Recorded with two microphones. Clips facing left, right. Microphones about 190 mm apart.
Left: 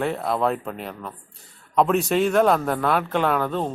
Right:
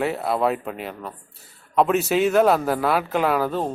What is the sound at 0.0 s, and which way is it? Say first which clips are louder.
A man's voice: right 1 dB; 5° right (ahead or behind).